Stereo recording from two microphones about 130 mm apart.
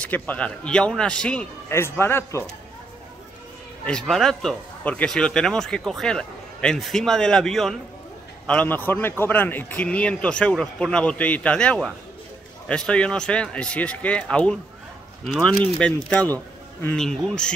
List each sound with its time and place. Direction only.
0.0 s a man's voice: 10° left (ahead or behind)
1.7 s a man's voice: 20° left (ahead or behind)
3.8 s a man's voice: 5° left (ahead or behind)